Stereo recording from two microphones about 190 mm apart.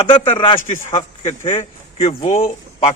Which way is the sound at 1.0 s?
40° left (ahead or behind).